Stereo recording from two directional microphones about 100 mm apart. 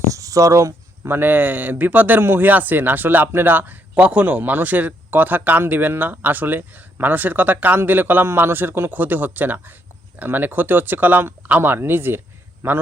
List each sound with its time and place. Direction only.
0.0 s speech: 35° right (ahead or behind)